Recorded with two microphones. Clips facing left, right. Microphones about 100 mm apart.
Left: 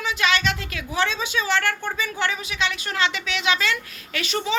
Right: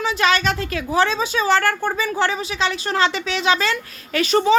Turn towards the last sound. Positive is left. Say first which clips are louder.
# right 9 dB
turn(degrees=-40)  # may be behind; listen again after turning